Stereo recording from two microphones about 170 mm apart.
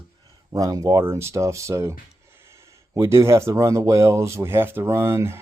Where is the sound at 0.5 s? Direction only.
20° right (ahead or behind).